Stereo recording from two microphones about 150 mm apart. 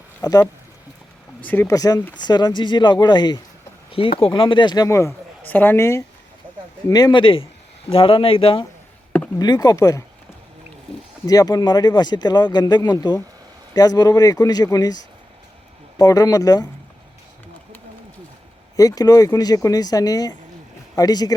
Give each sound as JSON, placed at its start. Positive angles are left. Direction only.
{"t": 0.2, "sound": "speech", "side_deg": 25}
{"t": 1.4, "sound": "speech", "side_deg": 10}
{"t": 1.7, "sound": "a woman's voice", "side_deg": 25}
{"t": 9.4, "sound": "speech", "side_deg": 25}
{"t": 11.3, "sound": "speech", "side_deg": 25}
{"t": 18.8, "sound": "speech", "side_deg": 25}